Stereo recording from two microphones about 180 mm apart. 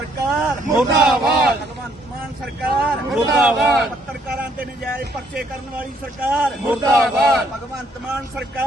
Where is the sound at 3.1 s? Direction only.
5° right (ahead or behind).